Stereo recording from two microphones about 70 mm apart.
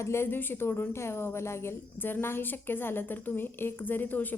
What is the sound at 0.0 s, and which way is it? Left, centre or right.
Speech, left.